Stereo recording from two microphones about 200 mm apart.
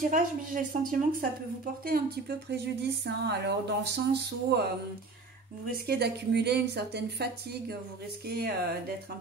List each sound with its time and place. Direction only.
0.1 s a woman's voice: 40° right (ahead or behind)
5.9 s a woman's voice: 55° right (ahead or behind)